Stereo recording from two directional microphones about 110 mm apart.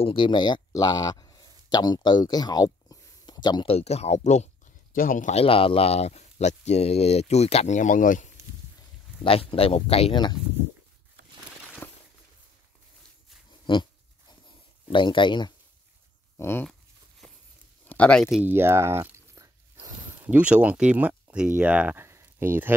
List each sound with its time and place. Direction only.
0.0 s speech: 50° left (ahead or behind)
3.6 s speech: 70° left (ahead or behind); by 4.5 s 90° left
5.3 s speech: 60° left (ahead or behind); by 8.3 s 90° left
9.2 s speech: 55° left (ahead or behind)
13.7 s speech: 50° left (ahead or behind)
14.9 s speech: 50° left (ahead or behind)
16.3 s speech: 20° left (ahead or behind)
17.8 s speech: 10° left (ahead or behind)
18.4 s speech: 20° right (ahead or behind)
20.2 s speech: 15° right (ahead or behind)
22.0 s a sound: 25° right (ahead or behind)